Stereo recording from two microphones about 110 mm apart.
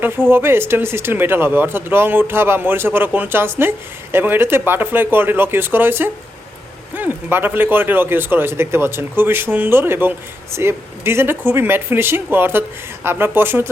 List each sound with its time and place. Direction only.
0.0 s speech: 20° right (ahead or behind)